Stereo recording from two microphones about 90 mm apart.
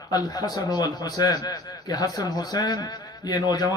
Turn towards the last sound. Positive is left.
turn(degrees=50)  # may be behind; listen again after turning